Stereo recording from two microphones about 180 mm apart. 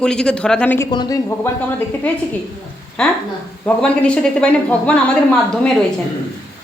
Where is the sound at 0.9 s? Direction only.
20° left (ahead or behind).